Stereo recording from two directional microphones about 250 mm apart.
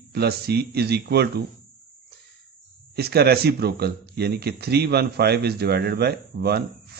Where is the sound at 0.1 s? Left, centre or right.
Right.